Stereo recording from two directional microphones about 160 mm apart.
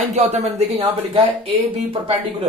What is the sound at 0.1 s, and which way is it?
Speech, 45° right (ahead or behind).